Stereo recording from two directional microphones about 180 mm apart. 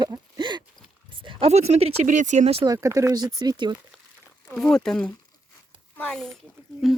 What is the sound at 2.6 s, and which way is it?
Speech, 15° right (ahead or behind).